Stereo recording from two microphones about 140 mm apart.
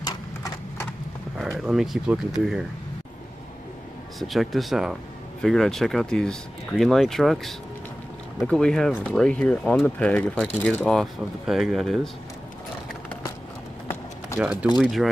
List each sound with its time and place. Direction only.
0.0 s clip-clop: 25° left (ahead or behind)
1.7 s speech: 5° right (ahead or behind)
4.2 s speech: centre (ahead or behind)
14.4 s speech: 10° right (ahead or behind)